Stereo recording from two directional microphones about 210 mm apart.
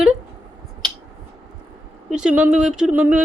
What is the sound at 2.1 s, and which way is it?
Speech, 5° right (ahead or behind).